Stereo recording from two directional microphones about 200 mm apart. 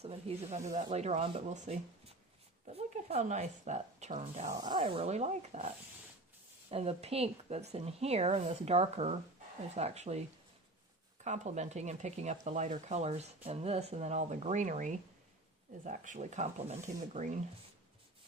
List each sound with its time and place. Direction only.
0.0 s speech: 30° right (ahead or behind)
4.5 s speech: 20° right (ahead or behind)